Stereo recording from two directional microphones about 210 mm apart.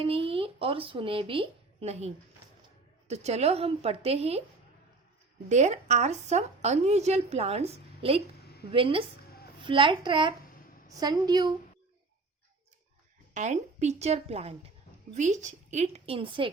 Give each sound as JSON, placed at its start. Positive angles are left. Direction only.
{"t": 0.0, "sound": "speech", "side_deg": -25}
{"t": 5.5, "sound": "a woman's voice", "side_deg": -35}
{"t": 13.3, "sound": "a woman's voice", "side_deg": -35}